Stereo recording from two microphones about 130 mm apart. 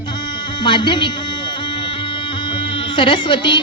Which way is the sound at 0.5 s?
35° left (ahead or behind).